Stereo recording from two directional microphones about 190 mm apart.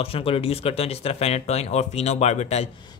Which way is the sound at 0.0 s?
30° left (ahead or behind).